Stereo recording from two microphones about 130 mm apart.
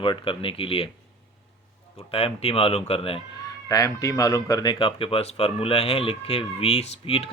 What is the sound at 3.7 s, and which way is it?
Speech, 25° left (ahead or behind).